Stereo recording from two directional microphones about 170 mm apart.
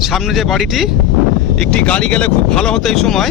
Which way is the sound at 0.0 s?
Centre (ahead or behind).